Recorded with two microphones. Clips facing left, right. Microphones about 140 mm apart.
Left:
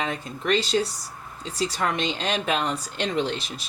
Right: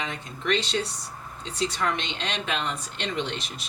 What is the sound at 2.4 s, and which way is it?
Speech, 40° left (ahead or behind).